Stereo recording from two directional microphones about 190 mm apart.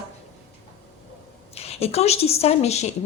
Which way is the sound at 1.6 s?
35° left (ahead or behind).